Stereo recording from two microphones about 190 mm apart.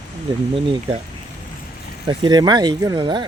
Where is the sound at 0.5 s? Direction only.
30° right (ahead or behind).